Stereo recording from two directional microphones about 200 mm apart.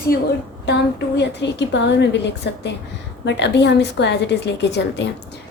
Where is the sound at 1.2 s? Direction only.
60° left (ahead or behind).